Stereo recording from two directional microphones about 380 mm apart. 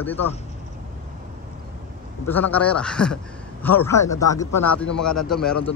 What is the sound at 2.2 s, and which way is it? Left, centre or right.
Speech, centre.